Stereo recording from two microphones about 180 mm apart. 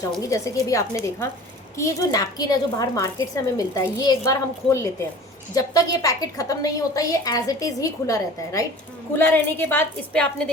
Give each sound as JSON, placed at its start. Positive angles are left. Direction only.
{"t": 0.2, "sound": "a woman's voice", "side_deg": 15}